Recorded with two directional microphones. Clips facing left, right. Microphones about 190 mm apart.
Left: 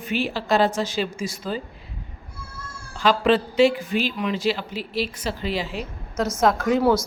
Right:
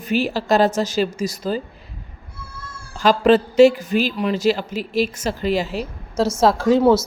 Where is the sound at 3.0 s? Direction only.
45° right (ahead or behind); by 7.0 s 25° right (ahead or behind).